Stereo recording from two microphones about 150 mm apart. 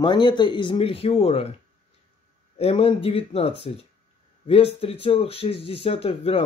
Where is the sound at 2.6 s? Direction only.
40° left (ahead or behind).